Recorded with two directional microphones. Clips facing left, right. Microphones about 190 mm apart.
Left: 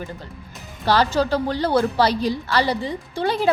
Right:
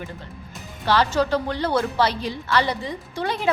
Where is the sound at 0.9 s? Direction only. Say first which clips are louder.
Left 1 dB; 35° left (ahead or behind).